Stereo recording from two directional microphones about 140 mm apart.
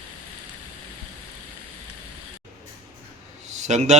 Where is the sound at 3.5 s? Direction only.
60° right (ahead or behind).